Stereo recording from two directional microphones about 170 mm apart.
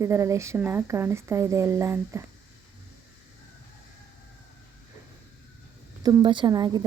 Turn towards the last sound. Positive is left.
turn(degrees=-25)  # may be behind; listen again after turning